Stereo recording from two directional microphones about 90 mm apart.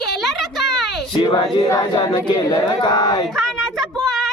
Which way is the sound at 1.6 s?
40° left (ahead or behind).